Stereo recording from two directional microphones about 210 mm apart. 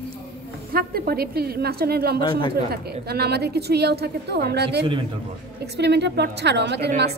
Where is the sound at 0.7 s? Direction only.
45° right (ahead or behind).